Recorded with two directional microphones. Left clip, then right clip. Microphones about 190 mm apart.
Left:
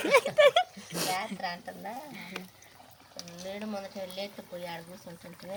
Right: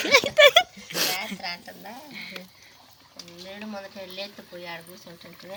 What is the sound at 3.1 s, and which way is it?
Boiling, 40° left (ahead or behind).